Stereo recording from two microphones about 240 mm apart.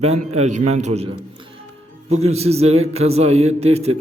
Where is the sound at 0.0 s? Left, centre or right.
Right.